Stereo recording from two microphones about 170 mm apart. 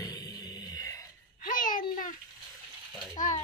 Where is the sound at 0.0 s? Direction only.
20° left (ahead or behind).